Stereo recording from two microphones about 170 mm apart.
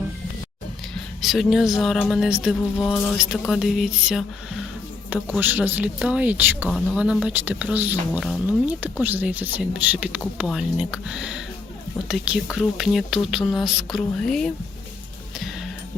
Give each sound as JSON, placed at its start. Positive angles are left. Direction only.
{"t": 1.2, "sound": "speech", "side_deg": 0}